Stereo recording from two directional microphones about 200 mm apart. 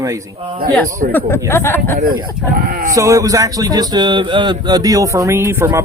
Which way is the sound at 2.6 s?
45° right (ahead or behind).